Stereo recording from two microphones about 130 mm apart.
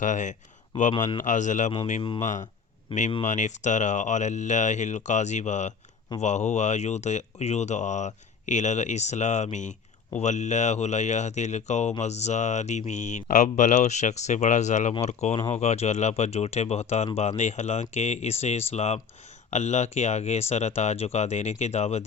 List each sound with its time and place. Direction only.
0.0 s speech: 70° left (ahead or behind)
2.9 s speech: 45° left (ahead or behind)
3.2 s speech: 70° left (ahead or behind)